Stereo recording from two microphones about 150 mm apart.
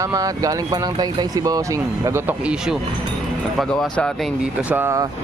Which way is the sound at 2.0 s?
15° right (ahead or behind).